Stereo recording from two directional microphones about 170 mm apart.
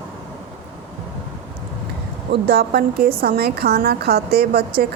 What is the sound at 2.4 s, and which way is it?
A woman's voice, 70° right (ahead or behind).